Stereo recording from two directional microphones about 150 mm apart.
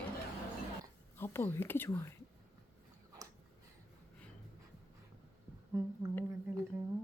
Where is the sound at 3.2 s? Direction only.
20° right (ahead or behind).